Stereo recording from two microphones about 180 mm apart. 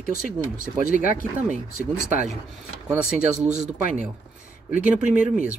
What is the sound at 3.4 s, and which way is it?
Speech, 40° right (ahead or behind).